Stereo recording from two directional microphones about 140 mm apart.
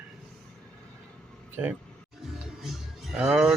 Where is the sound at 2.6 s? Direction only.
Centre (ahead or behind).